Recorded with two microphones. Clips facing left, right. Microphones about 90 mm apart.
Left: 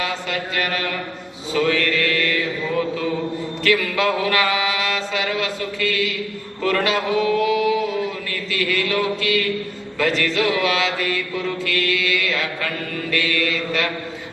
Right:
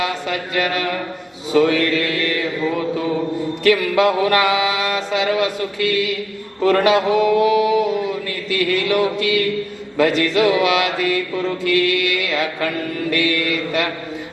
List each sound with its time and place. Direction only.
1.5 s mantra: 30° right (ahead or behind)
3.6 s mantra: 20° right (ahead or behind)